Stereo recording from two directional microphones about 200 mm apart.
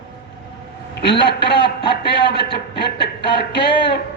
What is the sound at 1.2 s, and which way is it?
Speech, 55° left (ahead or behind).